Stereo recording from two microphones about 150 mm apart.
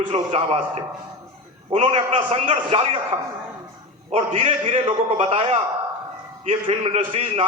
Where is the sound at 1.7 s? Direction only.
40° right (ahead or behind).